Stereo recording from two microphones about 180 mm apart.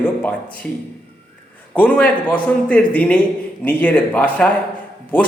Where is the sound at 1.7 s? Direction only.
5° left (ahead or behind).